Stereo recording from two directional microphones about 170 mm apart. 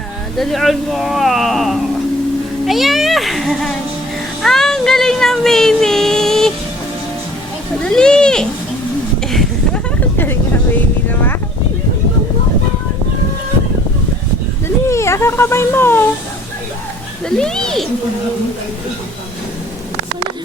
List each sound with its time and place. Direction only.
0.3 s speech: centre (ahead or behind)
4.4 s a sound: centre (ahead or behind)
7.9 s speech: 5° left (ahead or behind)
9.2 s a sound: centre (ahead or behind)
14.8 s speech: 15° left (ahead or behind)
17.2 s speech: 5° left (ahead or behind)